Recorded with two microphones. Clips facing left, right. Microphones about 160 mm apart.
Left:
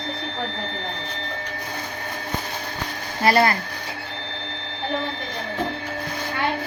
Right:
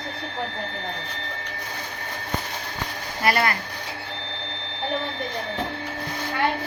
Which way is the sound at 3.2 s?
30° left (ahead or behind).